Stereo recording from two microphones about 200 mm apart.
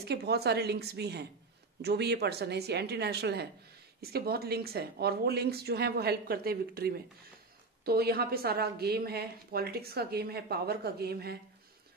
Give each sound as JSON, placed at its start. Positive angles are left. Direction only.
{"t": 0.1, "sound": "a woman's voice", "side_deg": -55}